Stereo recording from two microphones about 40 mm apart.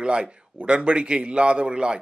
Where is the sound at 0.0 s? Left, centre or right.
Right.